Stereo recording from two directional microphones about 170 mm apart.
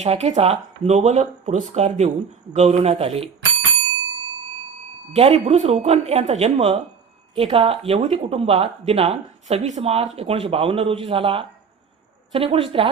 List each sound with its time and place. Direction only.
0.0 s speech: 40° right (ahead or behind)
5.1 s speech: 35° right (ahead or behind)